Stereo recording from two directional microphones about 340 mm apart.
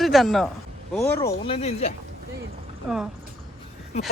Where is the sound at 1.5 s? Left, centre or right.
Centre.